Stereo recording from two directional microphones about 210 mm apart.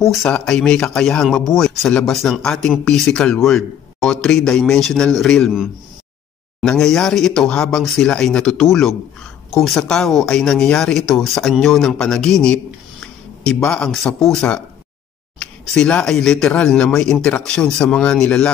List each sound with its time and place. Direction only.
0.1 s speech: 5° left (ahead or behind)